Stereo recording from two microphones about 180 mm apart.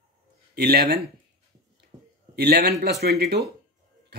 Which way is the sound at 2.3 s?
60° right (ahead or behind).